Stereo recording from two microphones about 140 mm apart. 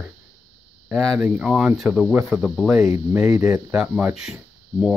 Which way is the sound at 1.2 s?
5° right (ahead or behind).